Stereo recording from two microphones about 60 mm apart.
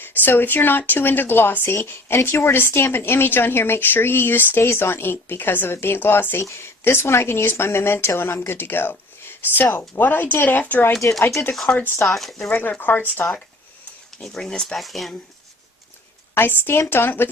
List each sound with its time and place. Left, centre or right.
0.0 s speech: left
6.4 s speech: left
12.0 s speech: centre
12.5 s speech: left
14.2 s speech: centre
16.3 s speech: left